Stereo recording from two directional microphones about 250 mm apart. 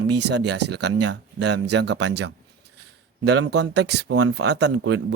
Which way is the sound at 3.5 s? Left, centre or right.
Right.